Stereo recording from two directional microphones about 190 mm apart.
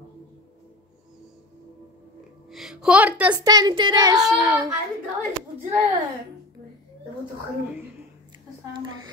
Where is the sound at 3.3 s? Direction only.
20° right (ahead or behind).